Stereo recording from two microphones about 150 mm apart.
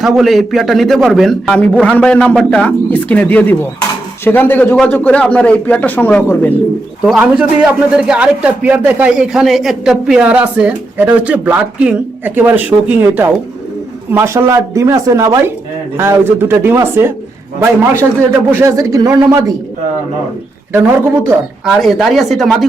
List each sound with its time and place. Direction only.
0.0 s a man's voice: centre (ahead or behind)
7.0 s a man's voice: 5° right (ahead or behind); by 19.5 s 25° right (ahead or behind)
20.7 s a man's voice: 15° right (ahead or behind)
21.6 s a man's voice: centre (ahead or behind)